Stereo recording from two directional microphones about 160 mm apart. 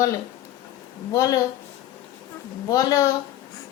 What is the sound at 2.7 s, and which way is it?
Speech, 20° left (ahead or behind).